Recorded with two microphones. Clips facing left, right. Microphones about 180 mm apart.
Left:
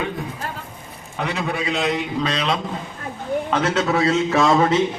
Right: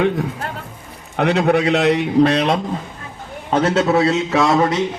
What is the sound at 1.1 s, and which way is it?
A man's voice, 70° right (ahead or behind).